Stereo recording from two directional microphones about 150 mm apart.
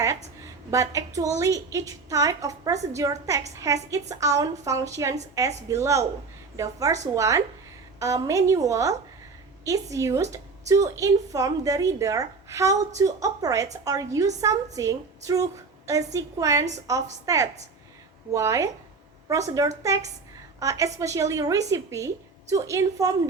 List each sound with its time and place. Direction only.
0.7 s a woman's voice: 20° right (ahead or behind)